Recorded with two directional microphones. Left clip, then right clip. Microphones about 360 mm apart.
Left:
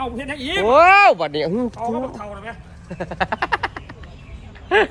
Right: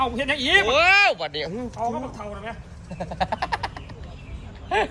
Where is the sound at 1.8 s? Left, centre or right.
Right.